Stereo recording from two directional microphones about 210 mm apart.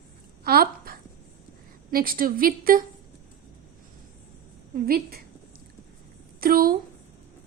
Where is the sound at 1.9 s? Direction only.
45° right (ahead or behind).